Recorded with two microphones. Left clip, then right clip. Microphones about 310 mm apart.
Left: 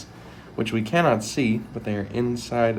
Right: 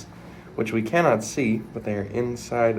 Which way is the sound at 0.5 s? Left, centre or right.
Centre.